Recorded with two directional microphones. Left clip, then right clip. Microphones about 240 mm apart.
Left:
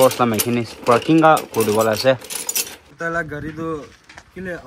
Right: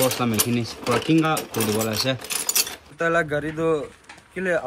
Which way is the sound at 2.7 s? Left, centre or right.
Centre.